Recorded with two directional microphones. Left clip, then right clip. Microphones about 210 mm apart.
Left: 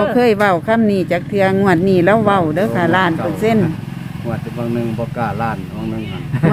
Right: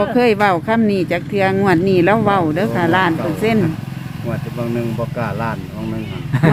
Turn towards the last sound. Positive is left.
turn(degrees=-40)  # may be behind; listen again after turning